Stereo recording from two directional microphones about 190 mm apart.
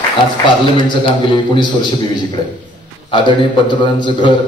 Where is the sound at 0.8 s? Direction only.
25° left (ahead or behind).